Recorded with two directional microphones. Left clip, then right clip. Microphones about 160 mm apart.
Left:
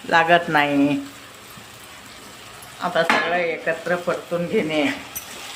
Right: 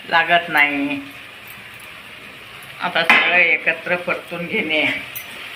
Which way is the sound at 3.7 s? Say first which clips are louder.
Right 3 dB; 20° left (ahead or behind).